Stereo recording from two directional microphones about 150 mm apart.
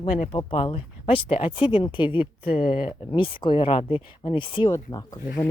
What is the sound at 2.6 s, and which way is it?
Speech, 75° left (ahead or behind).